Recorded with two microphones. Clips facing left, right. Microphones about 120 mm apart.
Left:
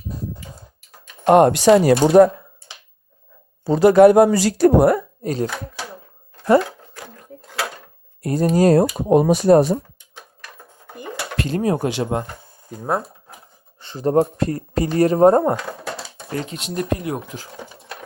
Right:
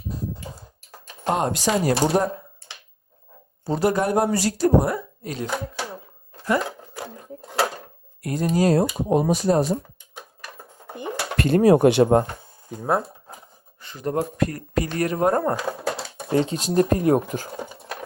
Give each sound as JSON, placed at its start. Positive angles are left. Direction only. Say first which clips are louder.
{"t": 1.2, "sound": "speech", "louder": "left 10 dB", "side_deg": 65}
{"t": 3.8, "sound": "speech", "louder": "left 11 dB", "side_deg": 85}
{"t": 4.9, "sound": "speech", "louder": "left 7 dB", "side_deg": 40}
{"t": 8.2, "sound": "speech", "louder": "left 5 dB", "side_deg": 40}
{"t": 10.2, "sound": "cutlery", "louder": "right 2 dB", "side_deg": -10}
{"t": 11.3, "sound": "speech", "louder": "right 5 dB", "side_deg": -60}
{"t": 12.8, "sound": "speech", "louder": "even", "side_deg": 0}
{"t": 13.8, "sound": "speech", "louder": "left 8 dB", "side_deg": 30}
{"t": 15.5, "sound": "typewriter", "louder": "right 2 dB", "side_deg": -5}
{"t": 16.3, "sound": "speech", "louder": "right 6 dB", "side_deg": -30}